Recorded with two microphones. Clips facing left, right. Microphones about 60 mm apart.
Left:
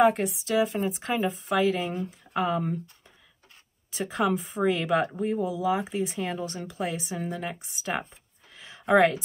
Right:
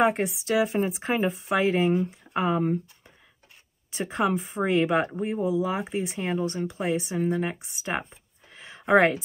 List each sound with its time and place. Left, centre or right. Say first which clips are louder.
0.0 s speech: left 1 dB; right
4.0 s speech: right 1 dB; centre